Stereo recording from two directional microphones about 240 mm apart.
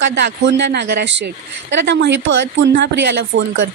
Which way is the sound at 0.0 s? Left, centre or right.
Right.